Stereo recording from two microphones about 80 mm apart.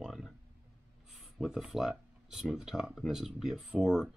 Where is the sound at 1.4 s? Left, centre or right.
Centre.